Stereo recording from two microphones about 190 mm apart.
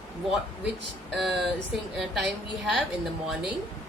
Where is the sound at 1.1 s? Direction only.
Centre (ahead or behind).